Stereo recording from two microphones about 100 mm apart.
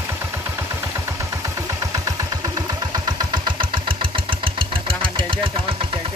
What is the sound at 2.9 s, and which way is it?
Engine, 45° right (ahead or behind).